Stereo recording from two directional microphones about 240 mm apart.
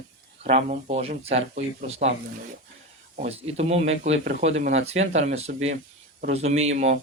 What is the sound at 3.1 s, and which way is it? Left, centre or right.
Speech, right.